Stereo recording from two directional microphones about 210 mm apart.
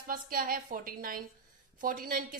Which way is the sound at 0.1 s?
45° right (ahead or behind).